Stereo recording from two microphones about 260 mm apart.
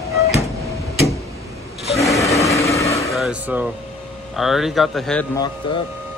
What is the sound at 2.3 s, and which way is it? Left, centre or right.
Vehicle, centre.